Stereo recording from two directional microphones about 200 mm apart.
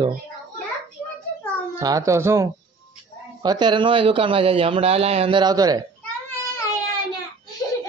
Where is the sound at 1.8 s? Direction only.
15° right (ahead or behind).